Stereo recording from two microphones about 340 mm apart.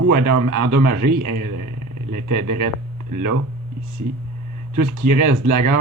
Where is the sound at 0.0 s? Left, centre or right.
Right.